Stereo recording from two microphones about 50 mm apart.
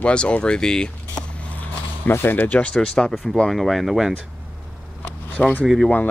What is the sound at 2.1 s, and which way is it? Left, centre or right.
Speech, left.